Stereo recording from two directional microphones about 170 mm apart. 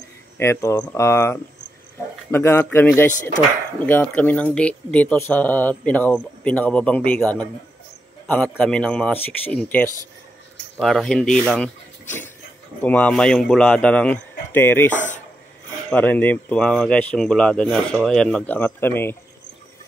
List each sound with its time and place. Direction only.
0.4 s speech: 15° left (ahead or behind)
12.8 s speech: 10° left (ahead or behind)
15.0 s a sound: 45° left (ahead or behind)
15.9 s speech: 10° left (ahead or behind)